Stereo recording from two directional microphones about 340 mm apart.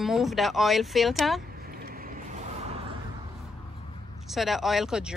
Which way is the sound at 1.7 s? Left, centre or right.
Right.